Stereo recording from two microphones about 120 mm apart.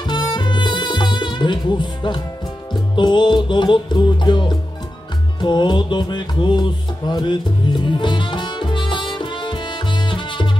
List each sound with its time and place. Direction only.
0.0 s music: 40° left (ahead or behind)